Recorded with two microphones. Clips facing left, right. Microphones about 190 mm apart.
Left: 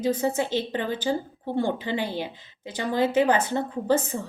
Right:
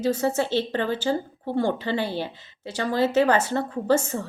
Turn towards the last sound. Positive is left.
turn(degrees=15)  # may be behind; listen again after turning